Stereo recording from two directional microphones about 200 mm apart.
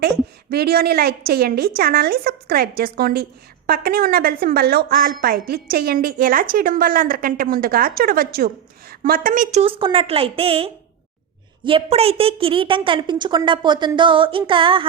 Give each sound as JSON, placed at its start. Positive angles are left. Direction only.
{"t": 0.5, "sound": "a woman's voice", "side_deg": -50}